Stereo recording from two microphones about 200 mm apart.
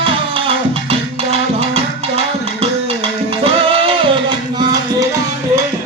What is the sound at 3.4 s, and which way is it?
Music, 25° right (ahead or behind).